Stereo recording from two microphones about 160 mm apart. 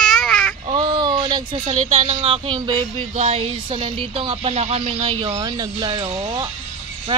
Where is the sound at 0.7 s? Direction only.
25° right (ahead or behind).